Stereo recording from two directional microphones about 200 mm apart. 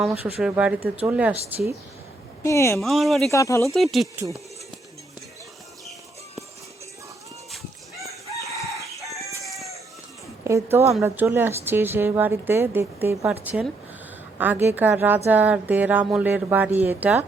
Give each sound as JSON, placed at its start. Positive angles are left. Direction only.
{"t": 0.3, "sound": "a woman's voice", "side_deg": -5}
{"t": 2.4, "sound": "speech", "side_deg": 15}
{"t": 2.7, "sound": "speech", "side_deg": 0}
{"t": 3.3, "sound": "speech", "side_deg": 15}
{"t": 3.9, "sound": "speech", "side_deg": 0}
{"t": 8.0, "sound": "chicken", "side_deg": -15}
{"t": 9.1, "sound": "chicken", "side_deg": 0}
{"t": 10.4, "sound": "a woman's voice", "side_deg": -15}